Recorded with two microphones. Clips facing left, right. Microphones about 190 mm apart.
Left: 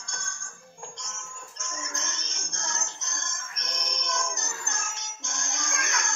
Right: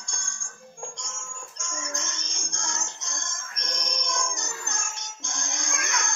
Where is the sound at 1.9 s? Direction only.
15° right (ahead or behind).